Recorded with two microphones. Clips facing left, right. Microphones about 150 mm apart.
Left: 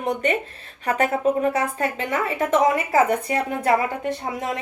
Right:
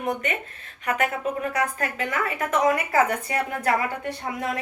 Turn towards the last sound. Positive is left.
turn(degrees=25)  # may be behind; listen again after turning